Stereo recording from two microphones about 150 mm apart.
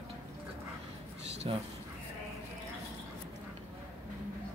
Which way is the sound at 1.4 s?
40° right (ahead or behind).